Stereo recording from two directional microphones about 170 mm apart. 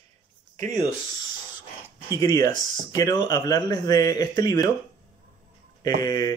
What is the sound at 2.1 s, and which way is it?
Speech, 20° left (ahead or behind).